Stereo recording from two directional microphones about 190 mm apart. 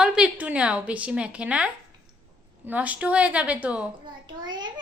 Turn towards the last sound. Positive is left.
turn(degrees=-25)  # may be behind; listen again after turning